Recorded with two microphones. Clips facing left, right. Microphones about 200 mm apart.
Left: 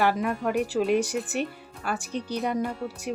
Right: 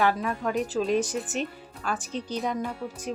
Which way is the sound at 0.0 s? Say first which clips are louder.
Left 1 dB; 5° left (ahead or behind).